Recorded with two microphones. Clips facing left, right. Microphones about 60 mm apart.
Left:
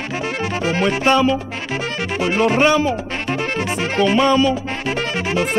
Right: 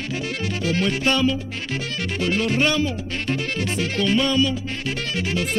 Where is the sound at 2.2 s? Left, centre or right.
Left.